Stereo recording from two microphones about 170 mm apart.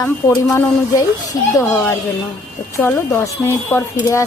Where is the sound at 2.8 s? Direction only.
15° left (ahead or behind).